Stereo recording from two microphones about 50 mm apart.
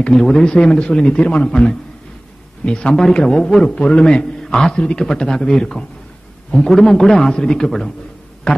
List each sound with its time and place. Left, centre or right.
0.0 s a man's voice: centre
3.6 s a man's voice: left
8.5 s a sound: centre